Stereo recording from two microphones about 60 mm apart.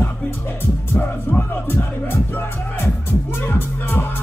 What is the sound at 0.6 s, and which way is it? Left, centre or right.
Speech, left.